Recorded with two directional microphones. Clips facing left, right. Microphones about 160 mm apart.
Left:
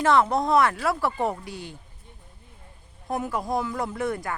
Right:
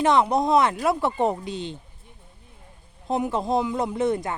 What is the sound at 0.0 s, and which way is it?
Speech, 20° right (ahead or behind).